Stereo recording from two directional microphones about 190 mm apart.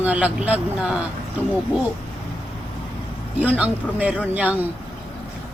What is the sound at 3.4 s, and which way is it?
Speech, 5° right (ahead or behind).